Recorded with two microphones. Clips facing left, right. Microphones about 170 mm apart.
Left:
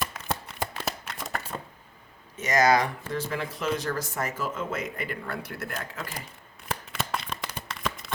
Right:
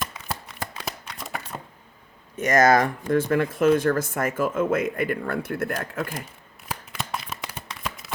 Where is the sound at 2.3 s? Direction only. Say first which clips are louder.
Right 4 dB; 50° right (ahead or behind).